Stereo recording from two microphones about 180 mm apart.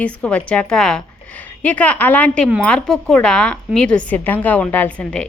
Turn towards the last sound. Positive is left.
turn(degrees=5)  # may be behind; listen again after turning